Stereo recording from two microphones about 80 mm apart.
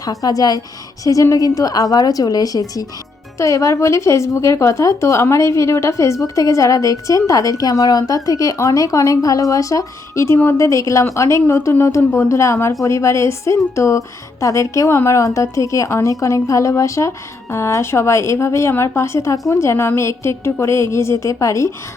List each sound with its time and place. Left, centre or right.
0.0 s a woman's voice: left